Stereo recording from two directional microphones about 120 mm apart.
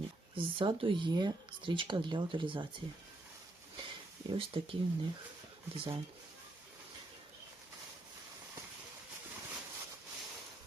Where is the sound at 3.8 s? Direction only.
45° right (ahead or behind).